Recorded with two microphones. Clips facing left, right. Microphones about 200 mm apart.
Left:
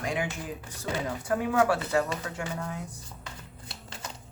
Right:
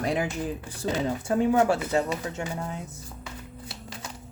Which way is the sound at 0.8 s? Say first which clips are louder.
Right 4 dB; 25° right (ahead or behind).